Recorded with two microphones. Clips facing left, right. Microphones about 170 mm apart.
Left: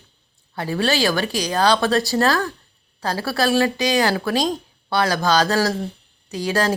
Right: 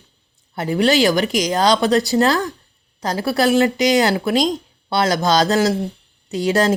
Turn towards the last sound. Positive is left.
turn(degrees=-20)  # may be behind; listen again after turning